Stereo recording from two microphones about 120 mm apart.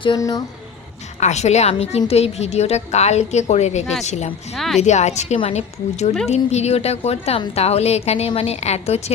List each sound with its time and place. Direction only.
0.2 s speech: 30° left (ahead or behind)
1.2 s a woman's voice: 70° left (ahead or behind)
4.5 s speech: centre (ahead or behind)
4.8 s a woman's voice: 70° left (ahead or behind)